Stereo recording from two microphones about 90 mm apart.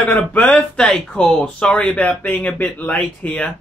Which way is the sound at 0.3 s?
15° left (ahead or behind).